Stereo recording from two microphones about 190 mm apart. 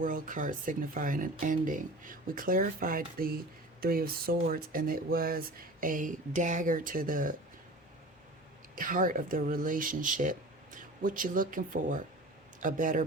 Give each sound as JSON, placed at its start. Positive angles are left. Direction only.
{"t": 0.0, "sound": "speech", "side_deg": -45}
{"t": 8.7, "sound": "speech", "side_deg": -45}